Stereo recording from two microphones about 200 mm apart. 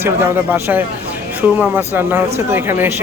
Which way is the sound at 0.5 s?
10° right (ahead or behind).